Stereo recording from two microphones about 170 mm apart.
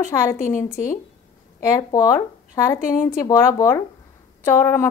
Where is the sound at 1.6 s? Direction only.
20° left (ahead or behind).